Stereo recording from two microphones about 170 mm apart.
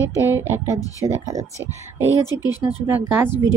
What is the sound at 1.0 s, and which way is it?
Speech, 20° right (ahead or behind).